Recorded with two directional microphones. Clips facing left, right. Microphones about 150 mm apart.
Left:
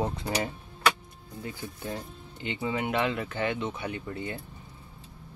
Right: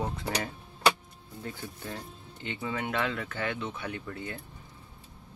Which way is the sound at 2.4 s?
15° left (ahead or behind).